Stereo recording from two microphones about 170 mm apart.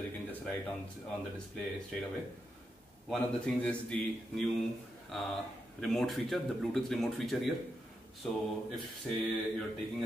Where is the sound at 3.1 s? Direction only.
5° left (ahead or behind).